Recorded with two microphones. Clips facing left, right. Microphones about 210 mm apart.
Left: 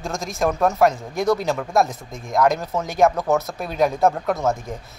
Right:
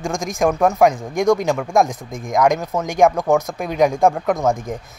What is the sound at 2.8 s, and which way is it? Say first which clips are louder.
Speech: right 3 dB; 15° right (ahead or behind).